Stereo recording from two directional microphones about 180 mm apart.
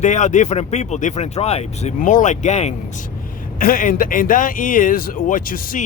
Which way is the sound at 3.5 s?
50° left (ahead or behind).